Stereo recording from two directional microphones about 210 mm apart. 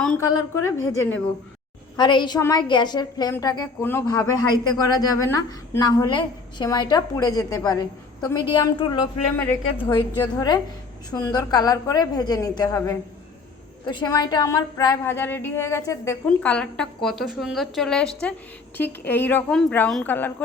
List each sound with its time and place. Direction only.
0.2 s a woman's voice: 15° left (ahead or behind)
2.0 s a woman's voice: 20° left (ahead or behind)
10.3 s a woman's voice: 20° left (ahead or behind)